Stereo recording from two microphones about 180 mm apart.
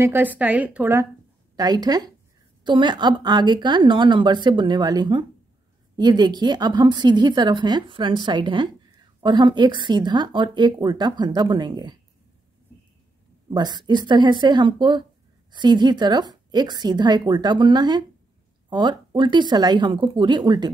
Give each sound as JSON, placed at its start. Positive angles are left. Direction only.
{"t": 0.0, "sound": "a woman's voice", "side_deg": -10}
{"t": 1.6, "sound": "speech", "side_deg": -20}
{"t": 13.5, "sound": "speech", "side_deg": -25}